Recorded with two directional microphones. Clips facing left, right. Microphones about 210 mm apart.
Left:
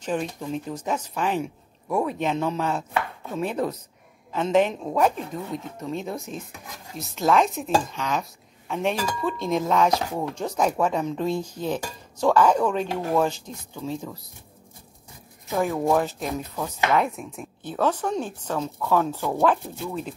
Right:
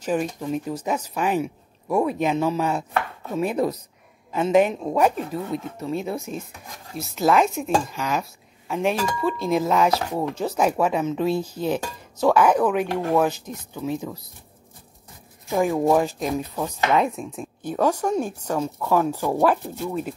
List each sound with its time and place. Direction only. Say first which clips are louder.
0.0 s speech: right 3 dB; 10° right (ahead or behind)
13.8 s speech: right 4 dB; 20° right (ahead or behind)
15.4 s speech: right 3 dB; 15° right (ahead or behind)